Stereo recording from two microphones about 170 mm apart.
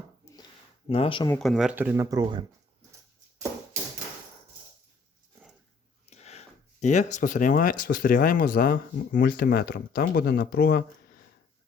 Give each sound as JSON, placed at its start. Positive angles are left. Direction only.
{"t": 0.9, "sound": "speech", "side_deg": 35}
{"t": 1.3, "sound": "speech", "side_deg": 0}
{"t": 6.1, "sound": "speech", "side_deg": 40}